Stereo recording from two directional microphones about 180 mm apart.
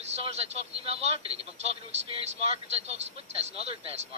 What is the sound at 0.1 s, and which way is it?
Speech, 35° right (ahead or behind).